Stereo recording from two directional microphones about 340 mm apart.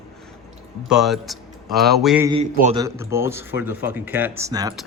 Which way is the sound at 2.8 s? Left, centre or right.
Centre.